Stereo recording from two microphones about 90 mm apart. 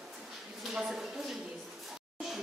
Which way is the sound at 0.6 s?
5° right (ahead or behind).